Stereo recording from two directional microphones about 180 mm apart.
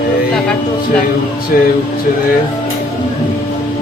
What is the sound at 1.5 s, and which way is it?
Speech, 50° left (ahead or behind).